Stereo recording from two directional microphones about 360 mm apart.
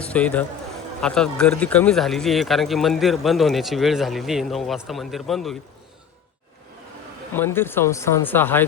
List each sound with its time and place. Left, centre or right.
0.0 s a man's voice: centre
7.3 s speech: centre